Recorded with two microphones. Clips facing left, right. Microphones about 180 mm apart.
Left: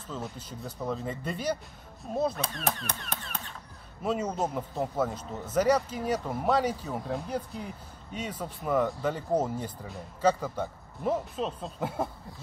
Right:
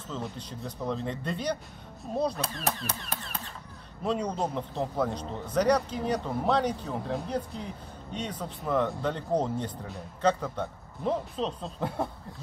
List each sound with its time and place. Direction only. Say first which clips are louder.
0.1 s a man's voice: right 1 dB; 5° left (ahead or behind)